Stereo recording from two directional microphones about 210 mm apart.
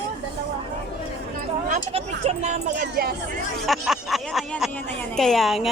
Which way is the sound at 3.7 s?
Centre (ahead or behind).